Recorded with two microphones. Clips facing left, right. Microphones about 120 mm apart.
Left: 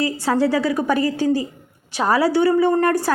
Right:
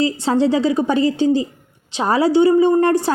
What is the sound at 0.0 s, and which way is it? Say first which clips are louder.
A woman's voice: right 2 dB; 25° right (ahead or behind).